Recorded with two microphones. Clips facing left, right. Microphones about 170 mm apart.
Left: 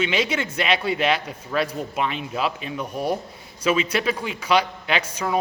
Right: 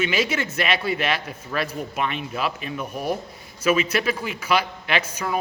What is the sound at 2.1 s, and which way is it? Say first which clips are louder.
Speech: left 1 dB; 25° left (ahead or behind).